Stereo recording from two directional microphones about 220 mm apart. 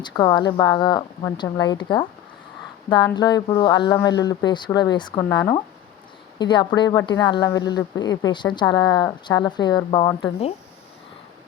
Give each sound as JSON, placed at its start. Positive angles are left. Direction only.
{"t": 0.0, "sound": "speech", "side_deg": 20}